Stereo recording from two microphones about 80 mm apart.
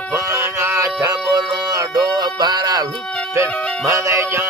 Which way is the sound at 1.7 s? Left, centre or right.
Right.